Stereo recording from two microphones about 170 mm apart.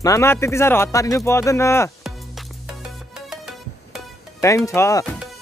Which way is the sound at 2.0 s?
5° right (ahead or behind).